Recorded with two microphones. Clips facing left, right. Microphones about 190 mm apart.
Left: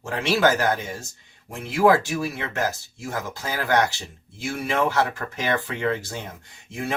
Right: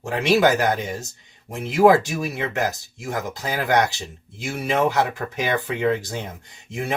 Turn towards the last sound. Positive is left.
turn(degrees=-15)  # may be behind; listen again after turning